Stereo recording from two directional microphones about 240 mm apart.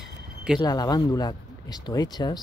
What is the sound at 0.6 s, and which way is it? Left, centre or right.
Speech, centre.